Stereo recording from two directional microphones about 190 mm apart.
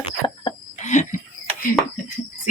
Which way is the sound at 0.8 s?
40° left (ahead or behind).